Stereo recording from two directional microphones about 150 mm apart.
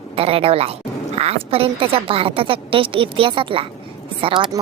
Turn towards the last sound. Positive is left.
turn(degrees=-30)  # may be behind; listen again after turning